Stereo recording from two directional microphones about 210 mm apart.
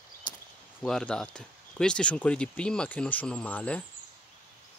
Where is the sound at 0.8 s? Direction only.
5° left (ahead or behind).